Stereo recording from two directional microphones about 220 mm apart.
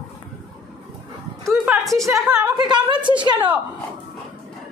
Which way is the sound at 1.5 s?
Centre (ahead or behind).